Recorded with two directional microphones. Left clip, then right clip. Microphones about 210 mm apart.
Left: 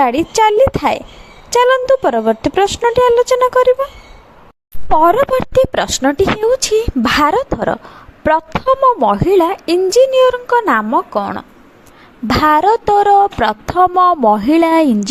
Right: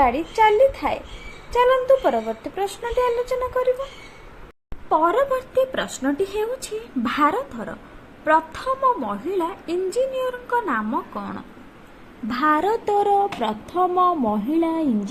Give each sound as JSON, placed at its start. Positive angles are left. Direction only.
{"t": 0.0, "sound": "speech", "side_deg": 50}
{"t": 4.9, "sound": "speech", "side_deg": 50}
{"t": 8.8, "sound": "speech", "side_deg": 45}